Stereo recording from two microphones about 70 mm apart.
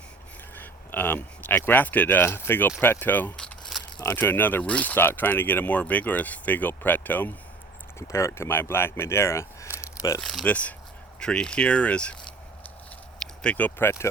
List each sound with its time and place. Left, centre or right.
0.5 s speech: left
3.3 s crumpling: centre
4.1 s speech: left
7.9 s speech: left
10.2 s speech: centre
10.4 s speech: centre